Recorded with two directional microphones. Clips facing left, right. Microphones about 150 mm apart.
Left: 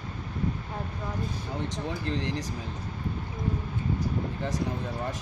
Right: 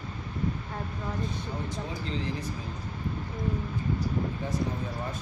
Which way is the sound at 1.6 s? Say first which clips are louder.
Left 3 dB; 75° left (ahead or behind).